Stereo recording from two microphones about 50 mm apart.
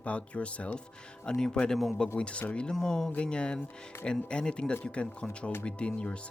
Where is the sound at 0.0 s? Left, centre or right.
Left.